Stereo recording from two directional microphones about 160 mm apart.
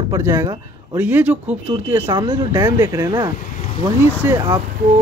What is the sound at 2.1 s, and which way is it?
Speech, 30° right (ahead or behind).